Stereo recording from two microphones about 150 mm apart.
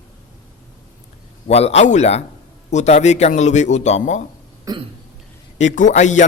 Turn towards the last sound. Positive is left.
turn(degrees=55)  # may be behind; listen again after turning